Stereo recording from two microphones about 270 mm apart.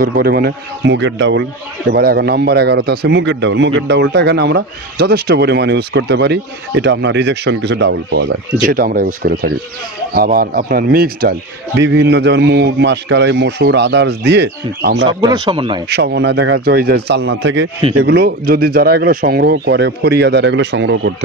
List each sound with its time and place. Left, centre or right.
0.0 s a man's voice: right
15.0 s speech: centre
15.9 s a man's voice: right